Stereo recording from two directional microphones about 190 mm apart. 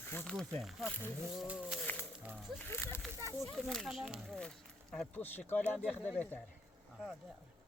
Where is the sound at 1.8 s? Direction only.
10° left (ahead or behind).